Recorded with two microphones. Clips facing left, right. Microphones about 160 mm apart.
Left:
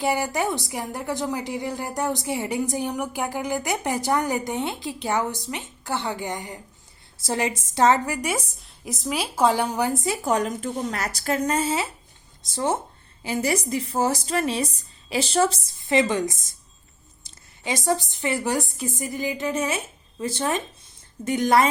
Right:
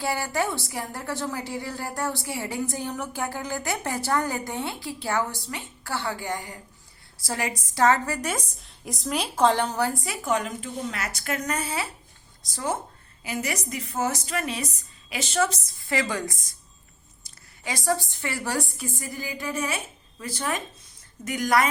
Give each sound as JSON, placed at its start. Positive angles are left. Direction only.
{"t": 0.0, "sound": "a woman's voice", "side_deg": 20}
{"t": 10.2, "sound": "a woman's voice", "side_deg": 40}